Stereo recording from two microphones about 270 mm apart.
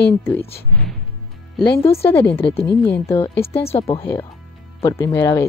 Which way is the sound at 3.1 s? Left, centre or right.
Centre.